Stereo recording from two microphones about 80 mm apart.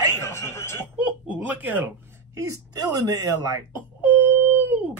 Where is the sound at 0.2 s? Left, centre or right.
Left.